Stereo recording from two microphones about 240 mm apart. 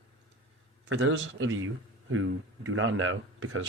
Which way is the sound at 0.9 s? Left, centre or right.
Right.